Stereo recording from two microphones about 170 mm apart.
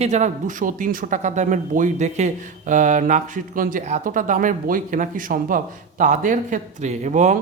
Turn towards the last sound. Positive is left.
turn(degrees=-45)  # may be behind; listen again after turning